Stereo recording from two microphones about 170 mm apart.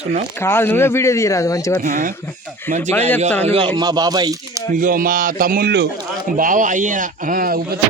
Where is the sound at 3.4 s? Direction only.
35° right (ahead or behind).